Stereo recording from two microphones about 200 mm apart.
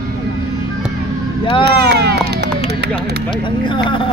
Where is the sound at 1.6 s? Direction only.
55° right (ahead or behind).